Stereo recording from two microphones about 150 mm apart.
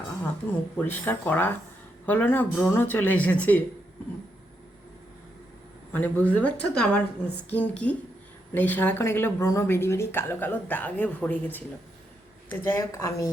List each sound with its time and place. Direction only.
0.8 s speech: 15° left (ahead or behind)
5.9 s speech: 10° left (ahead or behind)